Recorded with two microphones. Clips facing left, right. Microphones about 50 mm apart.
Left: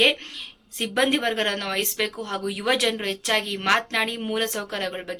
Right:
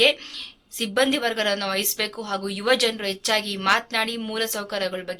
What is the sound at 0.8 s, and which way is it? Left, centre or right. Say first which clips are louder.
A woman's voice: right 1 dB; centre.